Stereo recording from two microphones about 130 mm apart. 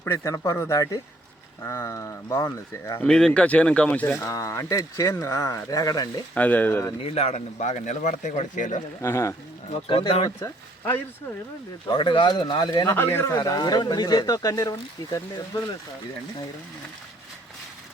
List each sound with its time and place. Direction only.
0.0 s speech: 20° left (ahead or behind)
3.0 s speech: 5° left (ahead or behind)
4.2 s speech: 25° left (ahead or behind)
6.3 s speech: 10° left (ahead or behind)
7.0 s speech: 55° left (ahead or behind); by 8.8 s 75° left (ahead or behind)
9.0 s speech: 20° left (ahead or behind)
9.6 s speech: 55° left (ahead or behind)
10.4 s speech: 25° left (ahead or behind)
11.9 s speech: 40° left (ahead or behind)
12.9 s speech: 15° left (ahead or behind)
13.4 s speech: 30° left (ahead or behind)